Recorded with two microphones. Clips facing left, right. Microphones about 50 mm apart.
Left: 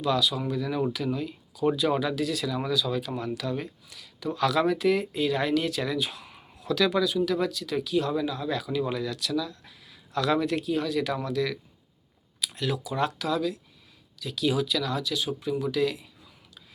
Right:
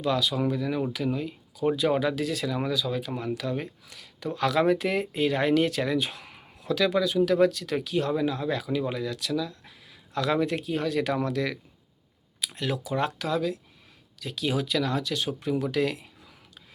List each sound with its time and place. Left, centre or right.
0.0 s speech: right
0.9 s speech: right
7.3 s speech: right